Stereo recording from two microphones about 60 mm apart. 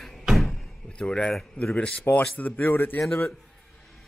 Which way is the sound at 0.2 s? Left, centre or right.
Centre.